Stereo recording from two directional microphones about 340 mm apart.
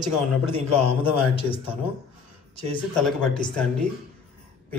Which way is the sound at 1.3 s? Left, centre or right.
Centre.